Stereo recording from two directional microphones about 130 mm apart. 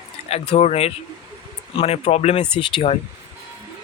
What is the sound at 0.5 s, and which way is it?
Speech, 50° left (ahead or behind).